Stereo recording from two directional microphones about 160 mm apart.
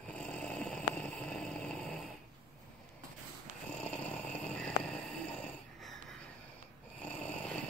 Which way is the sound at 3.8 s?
5° left (ahead or behind).